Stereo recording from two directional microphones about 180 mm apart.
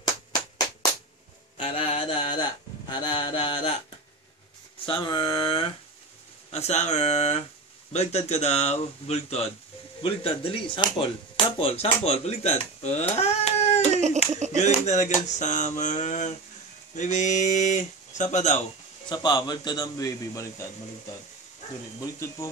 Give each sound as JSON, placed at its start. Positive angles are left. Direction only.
{"t": 1.6, "sound": "mantra", "side_deg": 35}
{"t": 2.9, "sound": "a man's voice", "side_deg": 25}
{"t": 4.8, "sound": "a man's voice", "side_deg": 30}
{"t": 6.5, "sound": "a sound", "side_deg": 40}
{"t": 10.0, "sound": "speech", "side_deg": 30}
{"t": 14.2, "sound": "a sound", "side_deg": 35}
{"t": 16.9, "sound": "speech", "side_deg": 45}
{"t": 19.0, "sound": "a man's voice", "side_deg": 25}
{"t": 22.0, "sound": "speech", "side_deg": 15}